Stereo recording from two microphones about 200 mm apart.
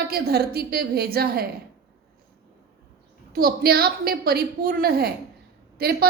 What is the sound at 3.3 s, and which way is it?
A woman's voice, 50° right (ahead or behind).